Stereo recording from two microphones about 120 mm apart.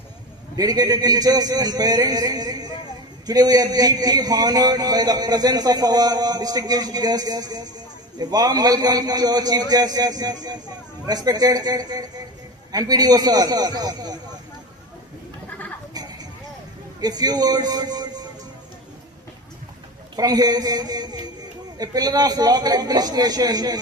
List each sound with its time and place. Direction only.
0.5 s a man's voice: 30° right (ahead or behind)
16.0 s a sound: 35° right (ahead or behind)
17.0 s a man's voice: 35° right (ahead or behind)
20.1 s a man's voice: 30° right (ahead or behind)